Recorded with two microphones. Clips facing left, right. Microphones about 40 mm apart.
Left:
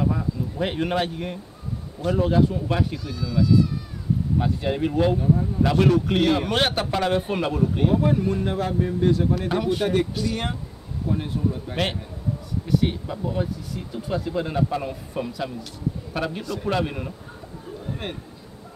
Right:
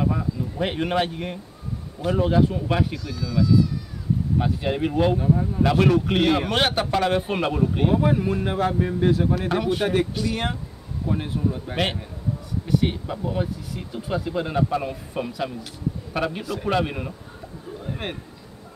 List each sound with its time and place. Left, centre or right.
0.0 s speech: centre
3.0 s speech: centre
4.4 s speech: centre
9.0 s speech: centre